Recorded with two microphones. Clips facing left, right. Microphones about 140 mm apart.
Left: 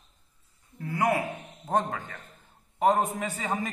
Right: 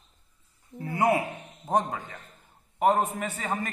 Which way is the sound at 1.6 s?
10° right (ahead or behind).